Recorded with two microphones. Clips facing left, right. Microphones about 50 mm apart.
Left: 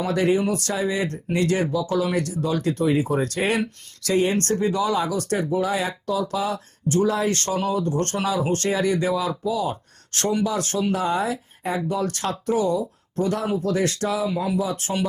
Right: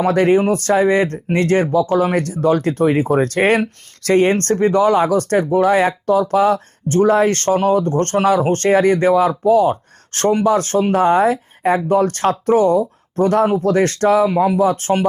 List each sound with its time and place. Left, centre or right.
0.0 s speech: right